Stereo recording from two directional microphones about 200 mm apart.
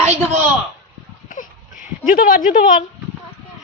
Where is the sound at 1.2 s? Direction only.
40° left (ahead or behind).